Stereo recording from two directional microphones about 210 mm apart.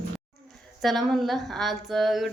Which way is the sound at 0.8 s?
Centre (ahead or behind).